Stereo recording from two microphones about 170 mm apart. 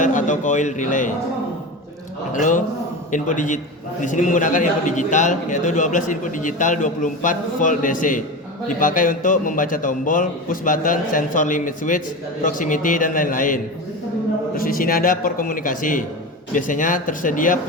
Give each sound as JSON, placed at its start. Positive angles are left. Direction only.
{"t": 0.0, "sound": "a man's voice", "side_deg": 50}
{"t": 2.3, "sound": "a man's voice", "side_deg": 50}